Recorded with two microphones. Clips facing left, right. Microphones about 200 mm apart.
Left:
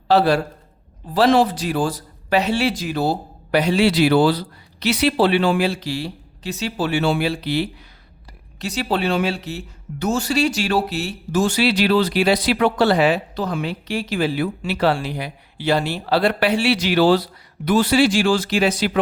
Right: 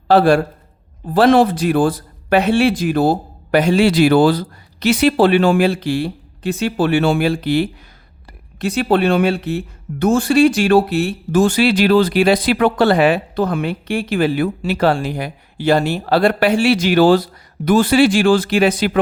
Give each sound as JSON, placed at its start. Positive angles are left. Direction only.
{"t": 0.1, "sound": "a man's voice", "side_deg": -50}